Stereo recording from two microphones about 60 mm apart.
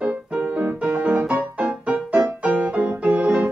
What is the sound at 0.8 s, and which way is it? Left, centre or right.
Music, right.